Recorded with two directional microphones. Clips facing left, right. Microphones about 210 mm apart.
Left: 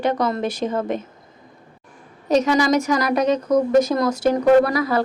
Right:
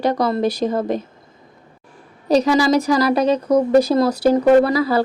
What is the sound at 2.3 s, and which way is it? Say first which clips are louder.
A woman's voice: right 2 dB; 35° right (ahead or behind).